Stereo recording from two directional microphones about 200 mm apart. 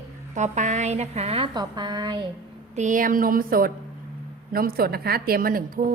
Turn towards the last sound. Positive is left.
turn(degrees=-45)  # may be behind; listen again after turning